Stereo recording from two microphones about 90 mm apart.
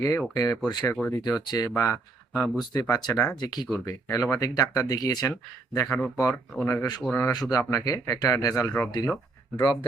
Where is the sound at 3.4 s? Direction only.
50° left (ahead or behind).